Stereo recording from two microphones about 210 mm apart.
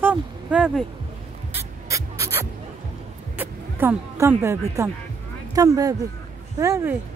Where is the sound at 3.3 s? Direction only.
10° right (ahead or behind).